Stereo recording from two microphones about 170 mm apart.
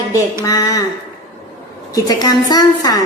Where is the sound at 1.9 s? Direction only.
20° left (ahead or behind).